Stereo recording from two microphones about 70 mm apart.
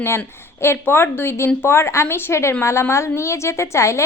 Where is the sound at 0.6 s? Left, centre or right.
Left.